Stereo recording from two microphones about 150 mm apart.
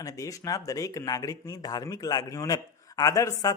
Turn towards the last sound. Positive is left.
turn(degrees=25)  # may be behind; listen again after turning